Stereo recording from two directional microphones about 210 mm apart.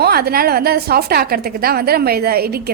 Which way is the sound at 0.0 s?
45° right (ahead or behind).